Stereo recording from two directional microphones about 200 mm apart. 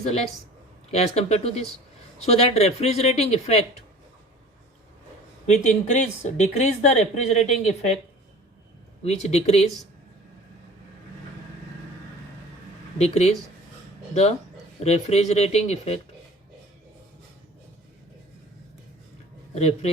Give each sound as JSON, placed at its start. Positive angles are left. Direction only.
{"t": 0.9, "sound": "speech", "side_deg": 30}
{"t": 5.5, "sound": "speech", "side_deg": 35}
{"t": 9.0, "sound": "speech", "side_deg": 35}
{"t": 13.0, "sound": "speech", "side_deg": 35}
{"t": 19.5, "sound": "speech", "side_deg": 30}